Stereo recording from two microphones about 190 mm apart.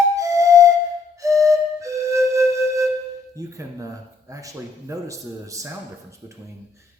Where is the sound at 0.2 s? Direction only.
15° right (ahead or behind).